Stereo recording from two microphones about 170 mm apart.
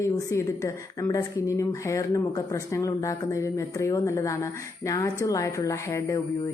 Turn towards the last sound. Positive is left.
turn(degrees=20)  # may be behind; listen again after turning